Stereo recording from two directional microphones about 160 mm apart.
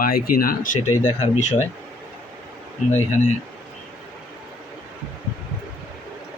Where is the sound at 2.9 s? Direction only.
45° left (ahead or behind).